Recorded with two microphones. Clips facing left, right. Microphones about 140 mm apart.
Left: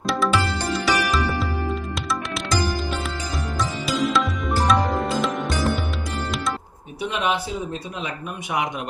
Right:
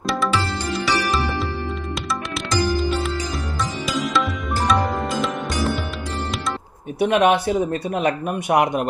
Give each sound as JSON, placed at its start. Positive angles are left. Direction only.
{"t": 0.7, "sound": "music", "side_deg": 0}
{"t": 4.1, "sound": "music", "side_deg": 0}
{"t": 7.0, "sound": "speech", "side_deg": -65}